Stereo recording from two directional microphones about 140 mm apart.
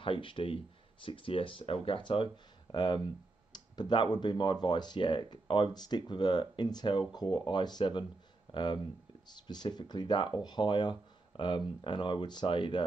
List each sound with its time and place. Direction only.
0.0 s speech: 40° left (ahead or behind)